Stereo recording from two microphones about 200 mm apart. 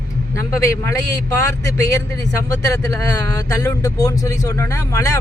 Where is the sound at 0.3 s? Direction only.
15° left (ahead or behind).